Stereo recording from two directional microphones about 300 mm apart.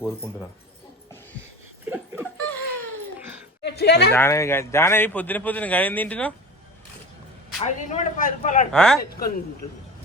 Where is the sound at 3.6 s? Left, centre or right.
Left.